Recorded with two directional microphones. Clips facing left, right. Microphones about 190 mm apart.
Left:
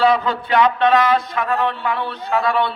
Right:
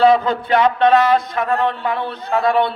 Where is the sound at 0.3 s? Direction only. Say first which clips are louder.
Right 1 dB; 45° right (ahead or behind).